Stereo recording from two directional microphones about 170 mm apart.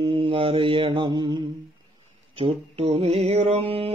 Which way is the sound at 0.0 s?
30° right (ahead or behind).